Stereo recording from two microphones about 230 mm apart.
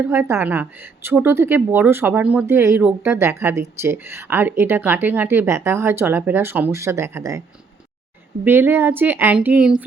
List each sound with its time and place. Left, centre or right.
0.0 s a woman's voice: centre
8.4 s a woman's voice: centre